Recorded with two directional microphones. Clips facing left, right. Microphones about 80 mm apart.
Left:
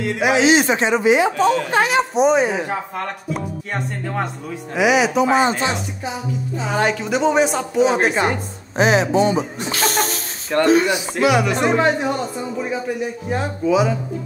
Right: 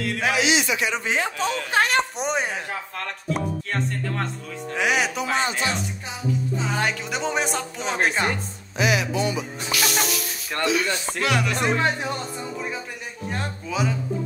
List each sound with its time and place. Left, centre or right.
0.0 s music: left
0.5 s speech: left
0.9 s speech: centre
1.7 s speech: centre
3.7 s speech: centre
5.6 s music: left
6.6 s speech: centre
8.7 s speech: left
10.9 s speech: centre
11.5 s speech: left
11.8 s speech: centre